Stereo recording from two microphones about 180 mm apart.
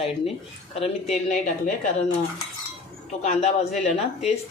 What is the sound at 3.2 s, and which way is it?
Speech, 40° left (ahead or behind).